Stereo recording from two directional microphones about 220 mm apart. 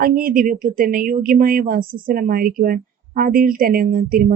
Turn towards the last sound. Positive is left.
turn(degrees=-40)  # may be behind; listen again after turning